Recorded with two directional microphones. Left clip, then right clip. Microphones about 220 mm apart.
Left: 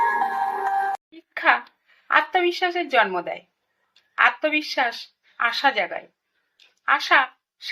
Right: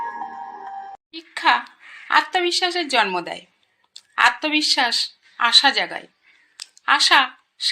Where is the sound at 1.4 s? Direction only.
45° right (ahead or behind).